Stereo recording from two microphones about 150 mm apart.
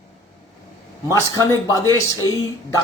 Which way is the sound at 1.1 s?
20° left (ahead or behind).